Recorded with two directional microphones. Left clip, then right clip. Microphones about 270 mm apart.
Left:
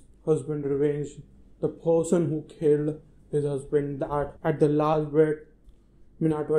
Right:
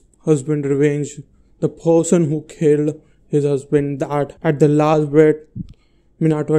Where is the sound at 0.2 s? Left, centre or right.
Right.